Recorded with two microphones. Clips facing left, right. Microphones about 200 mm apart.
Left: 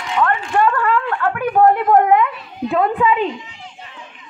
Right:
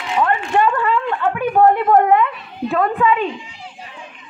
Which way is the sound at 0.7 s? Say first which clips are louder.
Even; 15° right (ahead or behind).